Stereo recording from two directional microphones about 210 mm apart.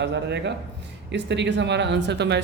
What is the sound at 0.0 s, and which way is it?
Speech, 55° right (ahead or behind).